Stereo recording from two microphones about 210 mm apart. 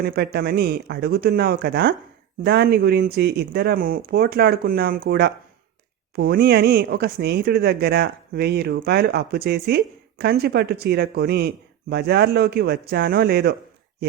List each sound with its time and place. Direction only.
0.0 s speech: 45° right (ahead or behind)